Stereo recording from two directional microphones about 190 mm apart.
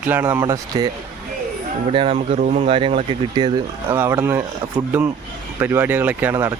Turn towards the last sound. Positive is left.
turn(degrees=-10)  # may be behind; listen again after turning